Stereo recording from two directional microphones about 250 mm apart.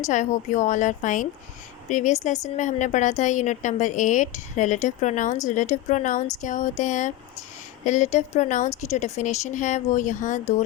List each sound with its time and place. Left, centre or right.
0.0 s speech: left